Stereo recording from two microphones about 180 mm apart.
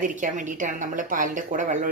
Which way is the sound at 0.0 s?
45° right (ahead or behind).